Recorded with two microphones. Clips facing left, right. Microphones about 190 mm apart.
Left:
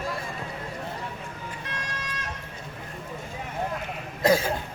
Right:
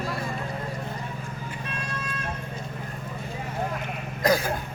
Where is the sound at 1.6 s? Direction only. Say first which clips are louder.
Right 3 dB; 90° left.